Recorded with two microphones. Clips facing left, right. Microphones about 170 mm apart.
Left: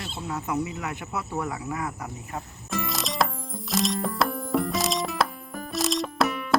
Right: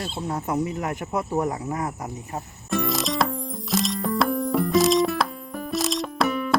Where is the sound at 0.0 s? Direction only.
35° right (ahead or behind).